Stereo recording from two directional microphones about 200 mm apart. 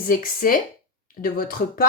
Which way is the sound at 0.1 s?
45° left (ahead or behind).